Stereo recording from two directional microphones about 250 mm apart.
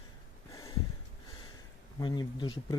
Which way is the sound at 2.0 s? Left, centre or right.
Centre.